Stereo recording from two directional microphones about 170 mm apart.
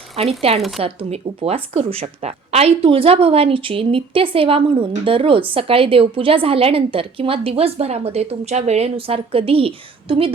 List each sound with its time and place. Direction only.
0.2 s speech: 35° right (ahead or behind)